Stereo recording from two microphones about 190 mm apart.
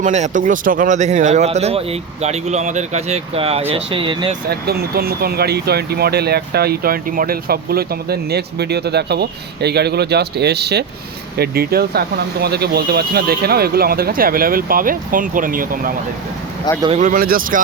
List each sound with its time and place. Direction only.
0.0 s speech: 40° right (ahead or behind)
4.4 s speech: 55° right (ahead or behind)
16.7 s speech: 20° left (ahead or behind)
17.0 s speech: 45° right (ahead or behind)